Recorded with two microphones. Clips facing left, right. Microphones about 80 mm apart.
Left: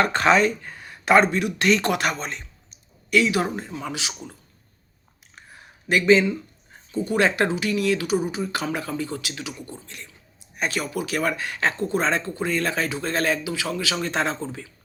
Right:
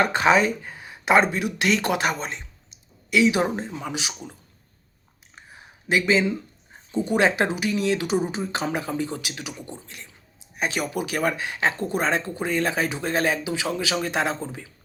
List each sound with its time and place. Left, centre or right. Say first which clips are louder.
0.0 s speech: even; centre
5.3 s a sound: even; centre
6.9 s speech: right 1 dB; centre